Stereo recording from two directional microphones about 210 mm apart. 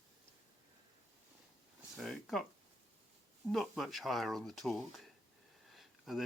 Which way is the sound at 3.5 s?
Centre (ahead or behind).